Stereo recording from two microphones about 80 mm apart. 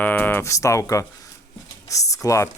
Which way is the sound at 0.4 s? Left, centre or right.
Left.